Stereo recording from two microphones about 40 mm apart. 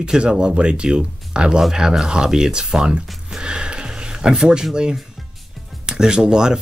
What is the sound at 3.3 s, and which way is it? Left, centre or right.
Music, right.